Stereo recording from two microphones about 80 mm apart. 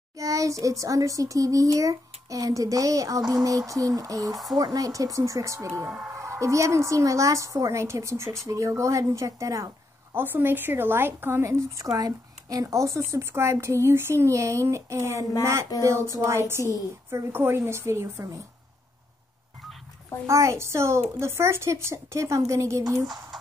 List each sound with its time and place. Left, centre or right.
0.2 s speech: right
5.9 s speech: right
6.1 s a woman's voice: right
10.1 s a woman's voice: right
20.2 s a woman's voice: right